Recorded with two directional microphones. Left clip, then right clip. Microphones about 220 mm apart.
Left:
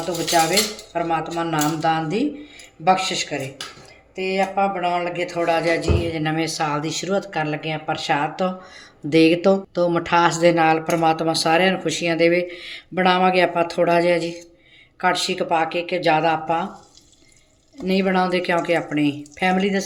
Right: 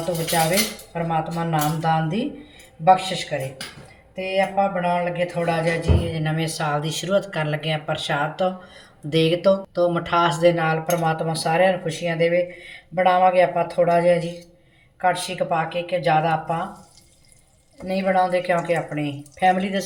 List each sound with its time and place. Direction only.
0.9 s speech: 45° left (ahead or behind); by 7.9 s 15° left (ahead or behind)
7.9 s speech: 30° left (ahead or behind); by 16.6 s 55° left (ahead or behind)
17.8 s speech: 50° left (ahead or behind)